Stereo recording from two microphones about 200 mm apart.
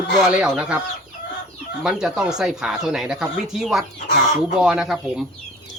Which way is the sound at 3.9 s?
35° left (ahead or behind).